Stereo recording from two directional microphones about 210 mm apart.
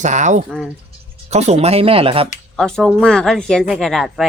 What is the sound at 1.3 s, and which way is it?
Speech, 30° right (ahead or behind).